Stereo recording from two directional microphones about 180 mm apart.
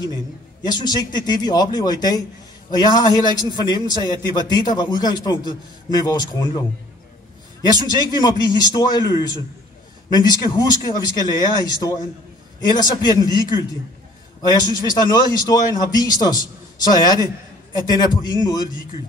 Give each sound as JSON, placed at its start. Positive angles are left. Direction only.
{"t": 0.6, "sound": "a man's voice", "side_deg": 20}
{"t": 7.8, "sound": "a man's voice", "side_deg": 20}
{"t": 10.1, "sound": "a man's voice", "side_deg": 20}
{"t": 12.5, "sound": "a man's voice", "side_deg": 20}